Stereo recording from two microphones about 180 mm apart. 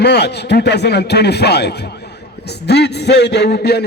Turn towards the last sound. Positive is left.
turn(degrees=65)  # may be behind; listen again after turning